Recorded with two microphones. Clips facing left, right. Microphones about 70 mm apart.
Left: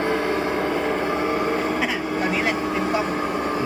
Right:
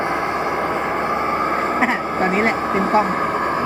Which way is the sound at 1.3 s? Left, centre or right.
Right.